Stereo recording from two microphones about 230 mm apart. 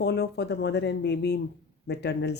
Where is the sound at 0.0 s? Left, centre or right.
Left.